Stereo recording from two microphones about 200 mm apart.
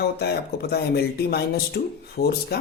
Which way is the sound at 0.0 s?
55° left (ahead or behind).